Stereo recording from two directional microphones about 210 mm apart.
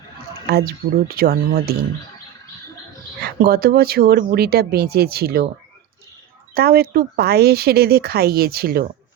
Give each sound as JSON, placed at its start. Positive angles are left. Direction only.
{"t": 0.4, "sound": "speech", "side_deg": -45}
{"t": 3.4, "sound": "speech", "side_deg": -50}
{"t": 6.5, "sound": "speech", "side_deg": -45}